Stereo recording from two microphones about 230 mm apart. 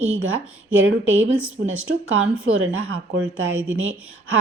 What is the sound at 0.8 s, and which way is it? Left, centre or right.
Speech, right.